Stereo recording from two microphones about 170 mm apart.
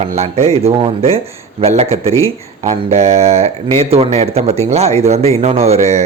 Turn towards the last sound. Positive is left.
turn(degrees=-40)  # may be behind; listen again after turning